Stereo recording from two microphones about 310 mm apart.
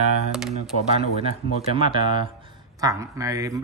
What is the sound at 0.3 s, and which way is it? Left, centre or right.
Speech, centre.